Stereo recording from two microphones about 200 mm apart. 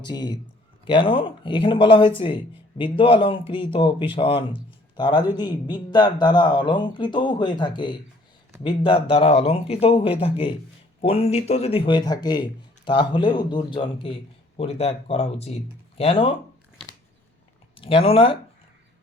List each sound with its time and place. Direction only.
0.0 s speech: 20° left (ahead or behind)
17.7 s speech: 25° left (ahead or behind)